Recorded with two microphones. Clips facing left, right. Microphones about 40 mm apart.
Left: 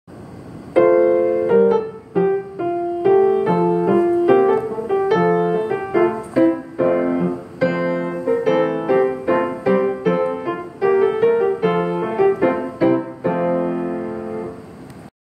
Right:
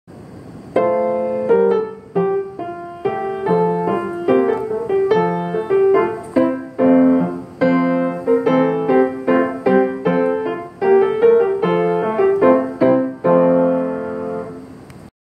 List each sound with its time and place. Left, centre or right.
0.9 s music: centre
1.2 s music: centre